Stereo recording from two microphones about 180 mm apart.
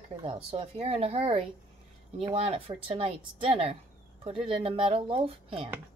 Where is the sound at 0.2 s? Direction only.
30° right (ahead or behind).